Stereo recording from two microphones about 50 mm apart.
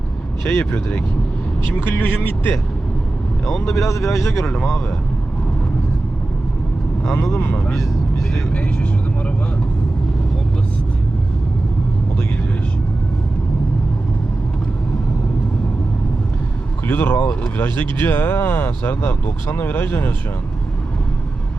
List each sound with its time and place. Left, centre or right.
0.6 s speech: left
3.4 s speech: centre
4.1 s speech: left
16.8 s speech: left